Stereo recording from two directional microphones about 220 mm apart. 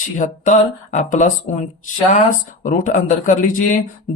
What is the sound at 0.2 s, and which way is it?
Speech, 35° left (ahead or behind).